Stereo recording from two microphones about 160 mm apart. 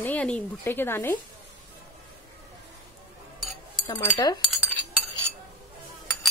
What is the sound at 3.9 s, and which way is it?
Speech, 25° left (ahead or behind).